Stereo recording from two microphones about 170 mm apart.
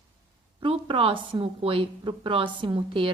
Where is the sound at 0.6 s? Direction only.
30° right (ahead or behind).